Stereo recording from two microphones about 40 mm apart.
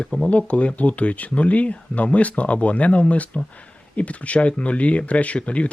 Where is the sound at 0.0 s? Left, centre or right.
Left.